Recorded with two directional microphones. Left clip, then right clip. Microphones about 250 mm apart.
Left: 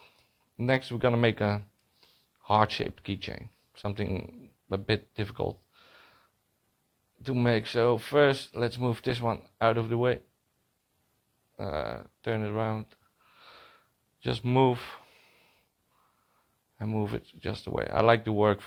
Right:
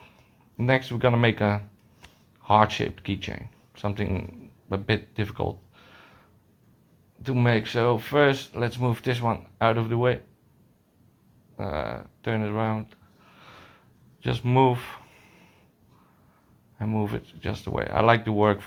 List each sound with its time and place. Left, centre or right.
0.5 s speech: left
7.2 s speech: left
11.5 s a sound: left
16.7 s speech: left